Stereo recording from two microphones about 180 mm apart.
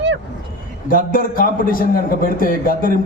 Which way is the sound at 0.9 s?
50° left (ahead or behind).